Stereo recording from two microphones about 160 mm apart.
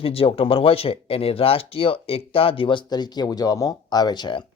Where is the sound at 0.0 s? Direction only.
35° left (ahead or behind).